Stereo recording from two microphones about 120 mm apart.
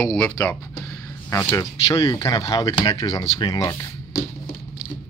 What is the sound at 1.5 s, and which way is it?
Speech, 30° left (ahead or behind).